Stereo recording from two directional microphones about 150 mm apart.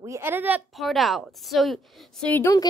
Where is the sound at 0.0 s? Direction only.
15° right (ahead or behind).